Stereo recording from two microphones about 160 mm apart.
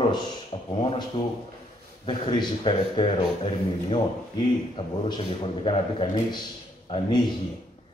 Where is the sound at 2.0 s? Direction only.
30° left (ahead or behind).